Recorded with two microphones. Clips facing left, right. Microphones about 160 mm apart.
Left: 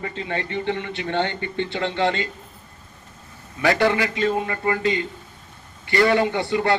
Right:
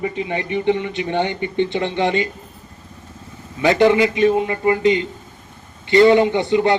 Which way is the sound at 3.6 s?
20° right (ahead or behind).